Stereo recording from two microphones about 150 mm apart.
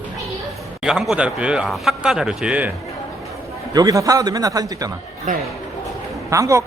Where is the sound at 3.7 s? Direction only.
25° right (ahead or behind).